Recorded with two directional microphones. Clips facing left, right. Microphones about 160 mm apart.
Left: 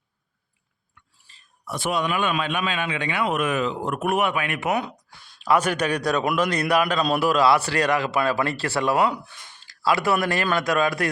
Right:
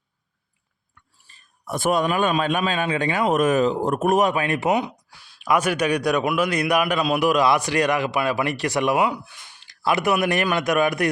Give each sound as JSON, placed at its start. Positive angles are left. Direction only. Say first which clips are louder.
{"t": 1.3, "sound": "a man's voice", "louder": "right 4 dB", "side_deg": -50}
{"t": 4.7, "sound": "a man's voice", "louder": "right 3 dB", "side_deg": -20}